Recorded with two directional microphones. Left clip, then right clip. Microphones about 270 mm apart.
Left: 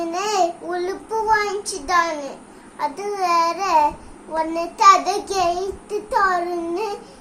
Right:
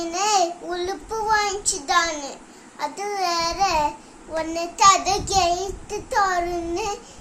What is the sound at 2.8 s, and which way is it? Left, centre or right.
A child's voice, centre.